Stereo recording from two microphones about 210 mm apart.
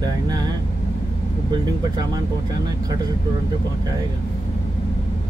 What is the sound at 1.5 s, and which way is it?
Speech, 20° right (ahead or behind).